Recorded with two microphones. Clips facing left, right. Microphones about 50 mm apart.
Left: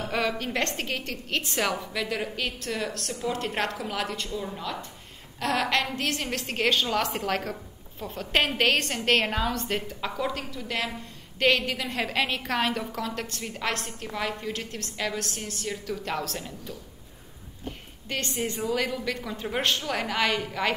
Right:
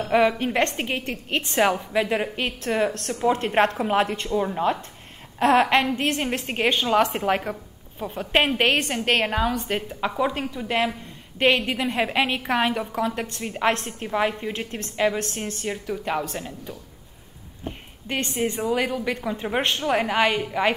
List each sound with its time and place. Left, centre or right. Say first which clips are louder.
0.0 s a woman's voice: right 8 dB; right
15.9 s a woman's voice: right 5 dB; centre
17.6 s a sound: right 4 dB; right
18.6 s a woman's voice: right 2 dB; centre